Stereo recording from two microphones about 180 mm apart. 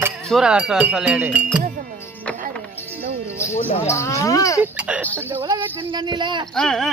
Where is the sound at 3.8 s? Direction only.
15° left (ahead or behind).